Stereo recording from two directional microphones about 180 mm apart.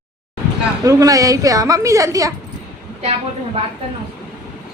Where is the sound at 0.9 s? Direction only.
20° right (ahead or behind).